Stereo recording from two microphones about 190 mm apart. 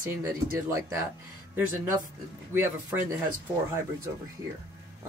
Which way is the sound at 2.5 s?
15° right (ahead or behind).